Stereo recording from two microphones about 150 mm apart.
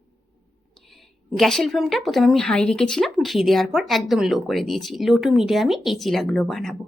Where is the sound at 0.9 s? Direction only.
Centre (ahead or behind).